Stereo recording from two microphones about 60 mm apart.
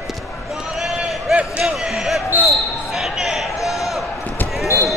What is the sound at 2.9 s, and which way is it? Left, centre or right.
Basketball bounce, centre.